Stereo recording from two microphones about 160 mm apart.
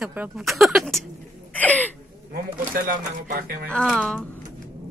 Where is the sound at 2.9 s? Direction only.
65° right (ahead or behind).